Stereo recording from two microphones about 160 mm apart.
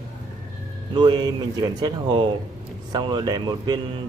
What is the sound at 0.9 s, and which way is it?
Speech, 30° right (ahead or behind).